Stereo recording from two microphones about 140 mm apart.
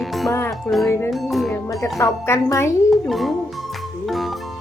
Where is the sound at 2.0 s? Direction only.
20° left (ahead or behind).